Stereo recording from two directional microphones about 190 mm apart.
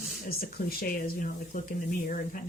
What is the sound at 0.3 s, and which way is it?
Speech, 50° left (ahead or behind).